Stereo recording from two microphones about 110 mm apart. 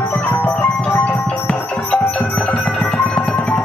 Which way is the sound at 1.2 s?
10° left (ahead or behind).